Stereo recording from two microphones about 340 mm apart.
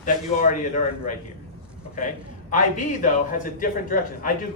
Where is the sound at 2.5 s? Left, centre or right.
Left.